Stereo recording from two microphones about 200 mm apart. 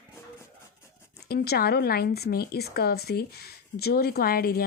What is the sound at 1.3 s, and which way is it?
A woman's voice, 50° left (ahead or behind).